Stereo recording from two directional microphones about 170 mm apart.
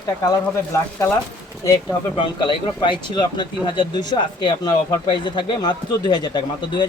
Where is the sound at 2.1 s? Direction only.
30° left (ahead or behind).